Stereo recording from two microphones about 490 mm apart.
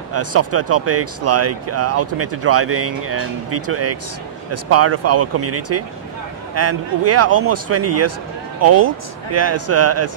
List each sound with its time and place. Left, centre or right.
0.1 s speech: right